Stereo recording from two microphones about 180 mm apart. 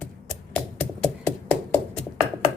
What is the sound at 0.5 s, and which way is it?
Hands, 5° left (ahead or behind).